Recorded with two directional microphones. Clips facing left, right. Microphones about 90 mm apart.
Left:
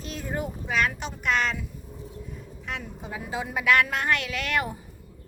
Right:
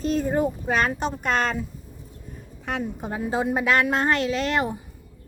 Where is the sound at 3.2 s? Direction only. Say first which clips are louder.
Right 7 dB; 35° right (ahead or behind).